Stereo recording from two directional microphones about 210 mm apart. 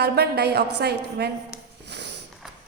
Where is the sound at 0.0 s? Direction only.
50° right (ahead or behind).